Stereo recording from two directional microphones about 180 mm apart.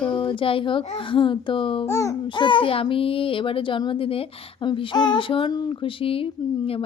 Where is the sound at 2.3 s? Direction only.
25° left (ahead or behind).